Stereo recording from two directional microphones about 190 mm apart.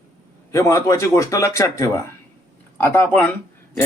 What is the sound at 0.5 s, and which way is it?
Speech, 15° left (ahead or behind).